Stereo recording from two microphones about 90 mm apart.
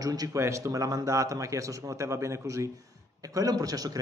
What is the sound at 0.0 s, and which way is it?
Speech, 40° right (ahead or behind).